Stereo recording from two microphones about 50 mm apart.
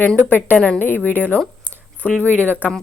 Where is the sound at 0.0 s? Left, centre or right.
Left.